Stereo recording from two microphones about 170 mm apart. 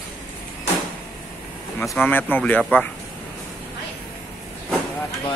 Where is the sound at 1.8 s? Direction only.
10° left (ahead or behind).